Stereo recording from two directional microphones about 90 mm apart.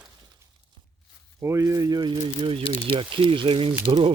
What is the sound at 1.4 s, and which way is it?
Speech, 35° right (ahead or behind).